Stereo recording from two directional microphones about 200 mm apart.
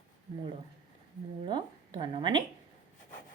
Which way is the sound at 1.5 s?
20° right (ahead or behind).